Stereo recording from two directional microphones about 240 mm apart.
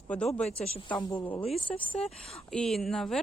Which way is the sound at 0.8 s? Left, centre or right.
Centre.